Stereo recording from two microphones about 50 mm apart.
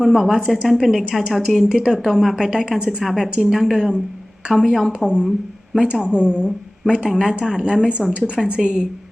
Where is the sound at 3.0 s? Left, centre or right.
Centre.